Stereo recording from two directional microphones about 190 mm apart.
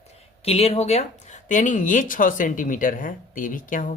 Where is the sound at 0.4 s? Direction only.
30° left (ahead or behind).